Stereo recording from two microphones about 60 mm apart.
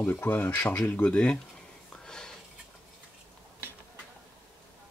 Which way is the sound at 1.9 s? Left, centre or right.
Centre.